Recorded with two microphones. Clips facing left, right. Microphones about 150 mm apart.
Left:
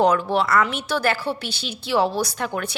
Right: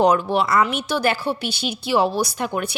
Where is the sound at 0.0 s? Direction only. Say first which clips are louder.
Right 1 dB; 15° right (ahead or behind).